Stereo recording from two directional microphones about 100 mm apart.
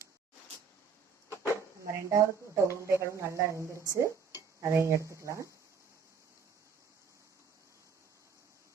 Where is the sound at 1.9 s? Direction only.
30° right (ahead or behind).